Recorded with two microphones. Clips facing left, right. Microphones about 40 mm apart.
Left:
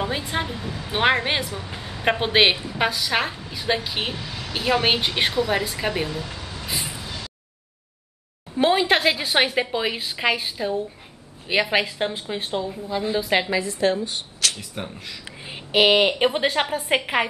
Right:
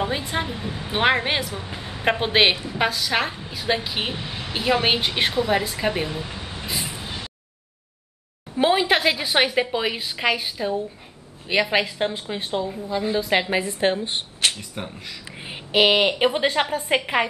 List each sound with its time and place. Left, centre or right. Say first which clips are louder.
0.0 s speech: right 1 dB; centre
0.7 s a woman's voice: right 1 dB; right
0.9 s a woman's voice: even; centre
1.6 s a sound: right 1 dB; centre
2.0 s a woman's voice: even; centre
4.1 s a woman's voice: right 1 dB; right
4.6 s a woman's voice: even; centre
6.0 s a sound: even; right
6.7 s vehicle: even; centre
7.0 s a sound: right 1 dB; right
8.5 s a woman's voice: even; centre
13.5 s a woman's voice: even; right
14.8 s a woman's voice: even; centre